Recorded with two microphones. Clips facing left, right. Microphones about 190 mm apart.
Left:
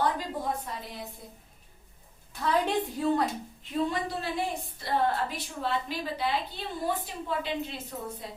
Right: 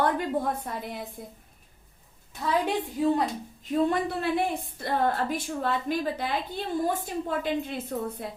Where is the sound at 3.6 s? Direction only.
50° right (ahead or behind).